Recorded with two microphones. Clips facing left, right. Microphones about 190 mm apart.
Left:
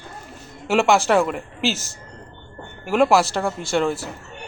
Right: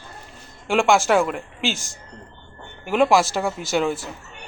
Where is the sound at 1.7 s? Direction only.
40° left (ahead or behind).